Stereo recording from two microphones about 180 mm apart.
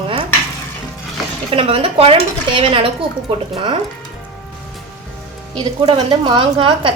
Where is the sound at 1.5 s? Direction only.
30° right (ahead or behind).